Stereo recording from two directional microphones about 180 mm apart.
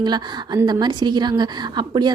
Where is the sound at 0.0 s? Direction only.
25° right (ahead or behind).